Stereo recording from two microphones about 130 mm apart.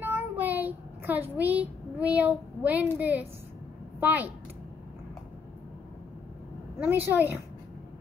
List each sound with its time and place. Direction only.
0.0 s child singing: 15° right (ahead or behind)
3.0 s a woman's voice: 15° right (ahead or behind)
6.9 s a woman's voice: 15° right (ahead or behind)